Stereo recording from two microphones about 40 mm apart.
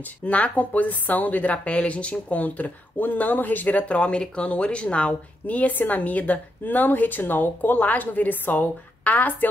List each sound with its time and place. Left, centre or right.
0.2 s a woman's voice: left
3.8 s speech: left
5.5 s a woman's voice: left